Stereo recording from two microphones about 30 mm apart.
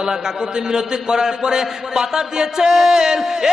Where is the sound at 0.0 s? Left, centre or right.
Right.